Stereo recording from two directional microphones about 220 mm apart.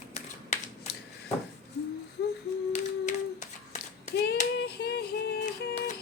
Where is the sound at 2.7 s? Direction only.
35° left (ahead or behind).